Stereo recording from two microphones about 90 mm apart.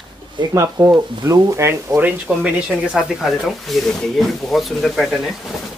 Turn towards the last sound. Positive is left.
turn(degrees=0)  # may be behind; listen again after turning